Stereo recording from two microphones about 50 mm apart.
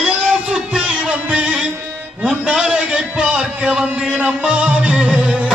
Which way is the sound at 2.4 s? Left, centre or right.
Centre.